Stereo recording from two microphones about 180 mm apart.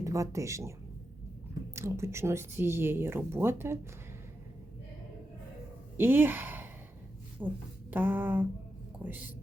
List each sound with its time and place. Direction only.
0.0 s speech: 15° right (ahead or behind)
1.7 s speech: 15° right (ahead or behind)
6.0 s a woman's voice: 10° right (ahead or behind)